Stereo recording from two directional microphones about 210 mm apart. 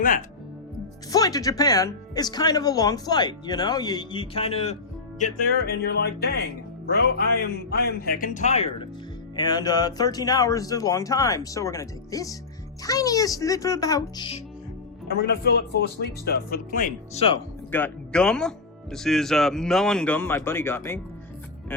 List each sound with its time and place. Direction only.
0.0 s speech: 40° left (ahead or behind)
1.1 s speech: 15° left (ahead or behind)
5.2 s speech: 45° left (ahead or behind); by 8.9 s 30° left (ahead or behind)
9.3 s speech: 20° left (ahead or behind)
15.0 s speech: 50° left (ahead or behind)
17.7 s speech: 10° left (ahead or behind)